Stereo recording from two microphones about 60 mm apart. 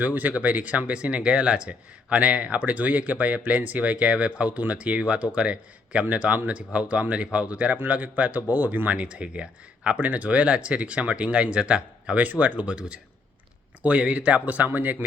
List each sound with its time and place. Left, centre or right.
0.0 s speech: right
8.9 s speech: right